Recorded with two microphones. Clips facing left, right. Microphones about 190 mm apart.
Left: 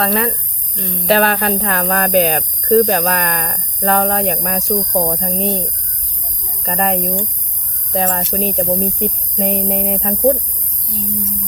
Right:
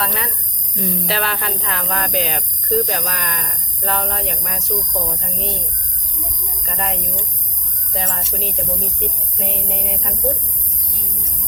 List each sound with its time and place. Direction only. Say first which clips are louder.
0.0 s speech: left 8 dB; 50° left (ahead or behind)
0.8 s speech: right 2 dB; 5° right (ahead or behind)
1.0 s speech: left 14 dB; 55° left (ahead or behind)
6.7 s speech: left 9 dB; 55° left (ahead or behind)